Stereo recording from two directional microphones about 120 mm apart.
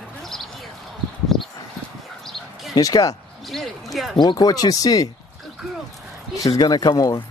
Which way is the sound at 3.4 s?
Centre (ahead or behind).